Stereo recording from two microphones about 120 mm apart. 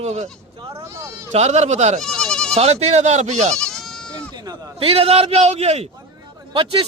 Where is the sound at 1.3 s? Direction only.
65° right (ahead or behind).